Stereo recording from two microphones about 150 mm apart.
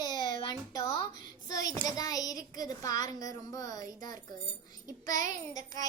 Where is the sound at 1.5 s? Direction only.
25° left (ahead or behind).